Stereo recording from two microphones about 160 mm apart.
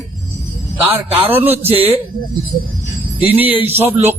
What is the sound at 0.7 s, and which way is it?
A man's voice, 15° right (ahead or behind).